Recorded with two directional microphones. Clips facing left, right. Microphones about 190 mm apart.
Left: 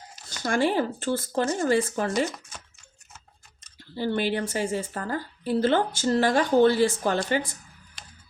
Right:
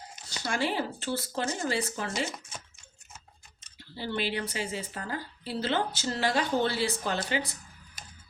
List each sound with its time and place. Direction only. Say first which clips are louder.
0.4 s speech: left 7 dB; 50° left (ahead or behind)
3.9 s speech: left 6 dB; 50° left (ahead or behind)